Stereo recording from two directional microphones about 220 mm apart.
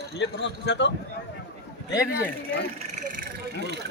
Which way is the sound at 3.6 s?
50° right (ahead or behind).